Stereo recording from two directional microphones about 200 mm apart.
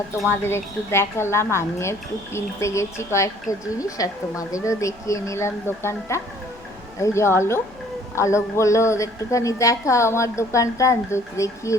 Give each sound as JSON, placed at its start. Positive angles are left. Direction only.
{"t": 0.2, "sound": "a woman's voice", "side_deg": 10}